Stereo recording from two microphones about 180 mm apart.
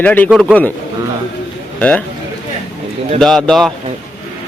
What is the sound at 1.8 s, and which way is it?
Speech, 10° left (ahead or behind).